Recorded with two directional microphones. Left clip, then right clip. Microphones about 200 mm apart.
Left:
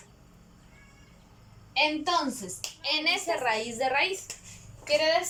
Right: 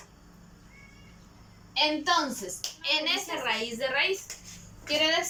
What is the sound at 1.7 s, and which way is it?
Speech, 15° left (ahead or behind).